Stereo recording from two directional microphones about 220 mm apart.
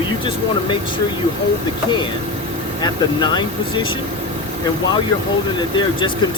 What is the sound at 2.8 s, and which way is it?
Speech, 20° left (ahead or behind).